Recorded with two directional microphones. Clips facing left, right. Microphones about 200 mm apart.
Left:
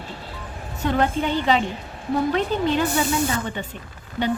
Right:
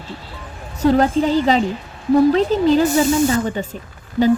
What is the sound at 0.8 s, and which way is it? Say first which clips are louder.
Speech: right 7 dB; 40° right (ahead or behind).